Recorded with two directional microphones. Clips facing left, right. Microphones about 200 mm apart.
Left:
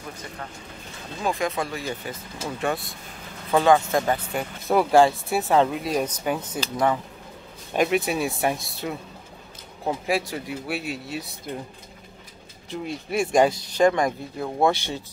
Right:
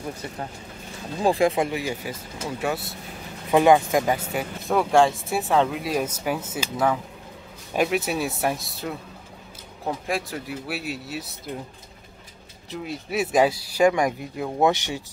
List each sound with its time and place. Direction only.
1.2 s speech: 30° right (ahead or behind)
1.7 s speech: 10° right (ahead or behind)
3.5 s speech: 15° right (ahead or behind)
12.6 s speech: centre (ahead or behind)